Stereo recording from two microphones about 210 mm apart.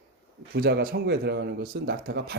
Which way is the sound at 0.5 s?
45° right (ahead or behind).